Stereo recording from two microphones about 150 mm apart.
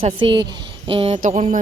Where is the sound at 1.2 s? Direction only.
50° right (ahead or behind).